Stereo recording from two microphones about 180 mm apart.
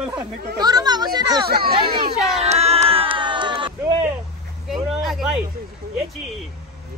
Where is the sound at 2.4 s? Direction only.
35° right (ahead or behind).